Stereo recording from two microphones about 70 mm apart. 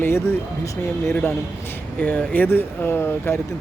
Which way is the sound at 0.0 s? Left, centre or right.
Left.